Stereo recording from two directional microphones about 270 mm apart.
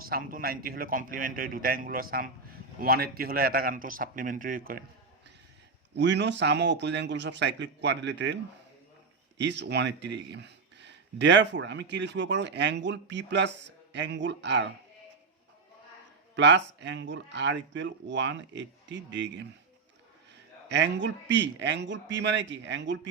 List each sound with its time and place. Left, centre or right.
0.0 s a man's voice: right
5.9 s a man's voice: right
9.4 s a man's voice: right
16.3 s a man's voice: right
20.7 s a man's voice: right